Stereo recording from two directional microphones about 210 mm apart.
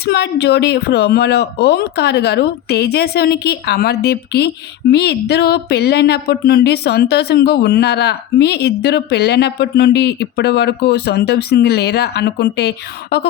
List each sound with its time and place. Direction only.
0.0 s speech: 50° left (ahead or behind)